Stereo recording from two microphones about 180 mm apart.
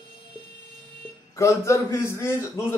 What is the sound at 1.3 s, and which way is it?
A man's voice, 15° left (ahead or behind).